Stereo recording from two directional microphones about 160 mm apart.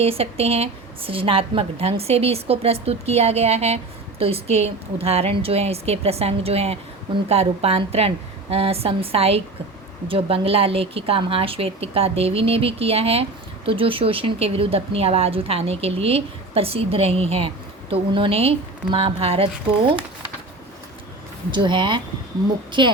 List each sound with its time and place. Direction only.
0.0 s speech: 40° right (ahead or behind)
21.5 s speech: 30° right (ahead or behind)